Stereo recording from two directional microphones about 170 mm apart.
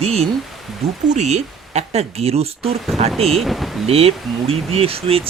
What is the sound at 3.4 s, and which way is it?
Speech, centre (ahead or behind).